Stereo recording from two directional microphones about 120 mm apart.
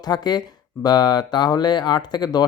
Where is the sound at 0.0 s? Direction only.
35° left (ahead or behind).